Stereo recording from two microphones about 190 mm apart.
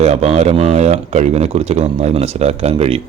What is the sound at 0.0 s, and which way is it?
Speech, 35° right (ahead or behind).